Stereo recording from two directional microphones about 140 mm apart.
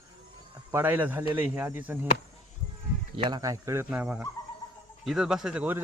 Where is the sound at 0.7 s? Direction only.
15° right (ahead or behind).